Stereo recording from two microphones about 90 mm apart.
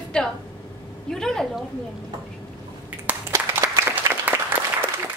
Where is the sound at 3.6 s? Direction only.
25° right (ahead or behind).